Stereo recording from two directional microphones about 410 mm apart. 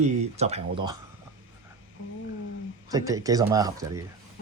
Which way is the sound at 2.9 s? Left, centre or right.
Centre.